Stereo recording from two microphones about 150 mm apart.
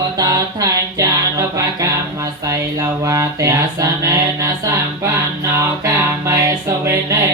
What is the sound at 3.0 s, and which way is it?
Mantra, 20° right (ahead or behind).